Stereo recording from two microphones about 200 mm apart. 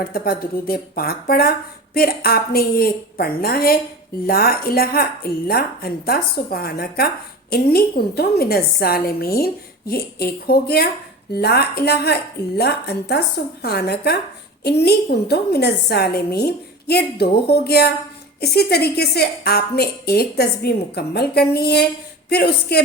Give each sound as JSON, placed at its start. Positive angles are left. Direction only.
{"t": 0.0, "sound": "speech", "side_deg": 45}